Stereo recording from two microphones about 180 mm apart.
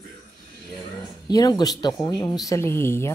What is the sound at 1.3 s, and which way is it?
Speech, 20° left (ahead or behind).